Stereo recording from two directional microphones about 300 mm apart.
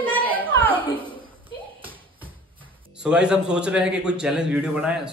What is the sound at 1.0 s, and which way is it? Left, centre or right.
Speech, centre.